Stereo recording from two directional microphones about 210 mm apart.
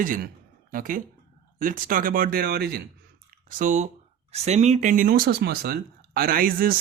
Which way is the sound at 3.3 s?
35° right (ahead or behind).